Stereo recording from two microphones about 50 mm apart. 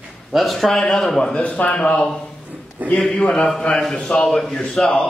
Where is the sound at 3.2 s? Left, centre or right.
Left; by 4.5 s centre.